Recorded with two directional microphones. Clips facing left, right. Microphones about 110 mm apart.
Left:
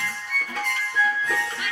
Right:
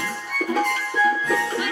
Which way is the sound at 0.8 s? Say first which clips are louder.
Right 4 dB; 15° right (ahead or behind).